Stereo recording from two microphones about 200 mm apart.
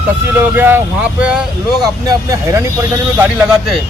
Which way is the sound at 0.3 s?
10° right (ahead or behind).